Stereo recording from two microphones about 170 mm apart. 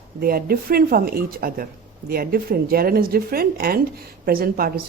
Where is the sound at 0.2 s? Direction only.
60° right (ahead or behind).